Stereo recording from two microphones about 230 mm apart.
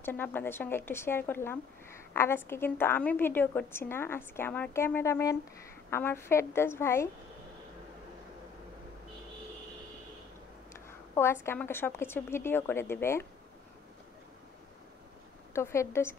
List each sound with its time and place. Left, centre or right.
0.0 s a woman's voice: centre
10.9 s a sound: centre
11.4 s a woman's voice: centre
15.5 s a woman's voice: centre